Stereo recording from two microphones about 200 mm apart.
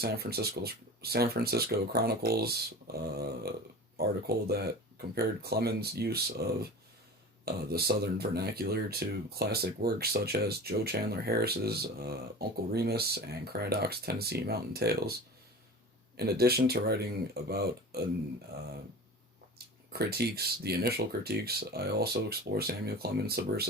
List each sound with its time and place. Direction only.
0.0 s speech: 50° right (ahead or behind)
16.1 s speech: 50° right (ahead or behind)
19.9 s speech: 50° right (ahead or behind)